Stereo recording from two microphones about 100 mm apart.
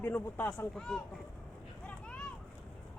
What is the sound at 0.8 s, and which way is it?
Speech, 5° left (ahead or behind).